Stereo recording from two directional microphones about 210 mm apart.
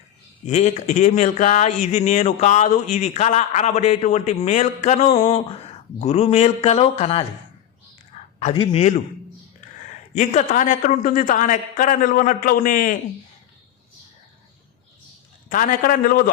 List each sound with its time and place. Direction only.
0.4 s a man's voice: 35° left (ahead or behind)
8.1 s a sound: 30° left (ahead or behind)
8.5 s a man's voice: 25° left (ahead or behind)
10.2 s speech: 40° left (ahead or behind)
15.4 s a man's voice: 40° left (ahead or behind)